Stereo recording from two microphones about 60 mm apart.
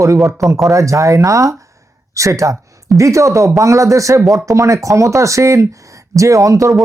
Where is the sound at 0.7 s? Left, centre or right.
Right.